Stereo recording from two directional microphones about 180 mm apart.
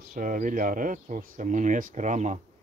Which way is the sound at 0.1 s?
50° right (ahead or behind).